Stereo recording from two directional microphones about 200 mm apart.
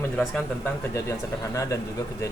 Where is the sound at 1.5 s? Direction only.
15° left (ahead or behind).